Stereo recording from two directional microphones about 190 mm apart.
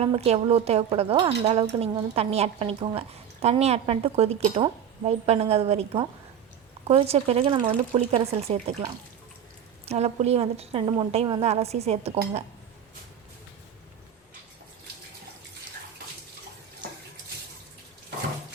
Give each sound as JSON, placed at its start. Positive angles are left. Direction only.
{"t": 0.0, "sound": "a woman's voice", "side_deg": -30}
{"t": 9.8, "sound": "a woman's voice", "side_deg": -35}